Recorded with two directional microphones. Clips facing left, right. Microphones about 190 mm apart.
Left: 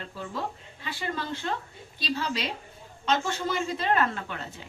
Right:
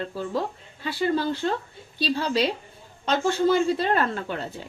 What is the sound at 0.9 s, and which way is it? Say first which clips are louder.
A woman's voice: right 9 dB; 40° right (ahead or behind).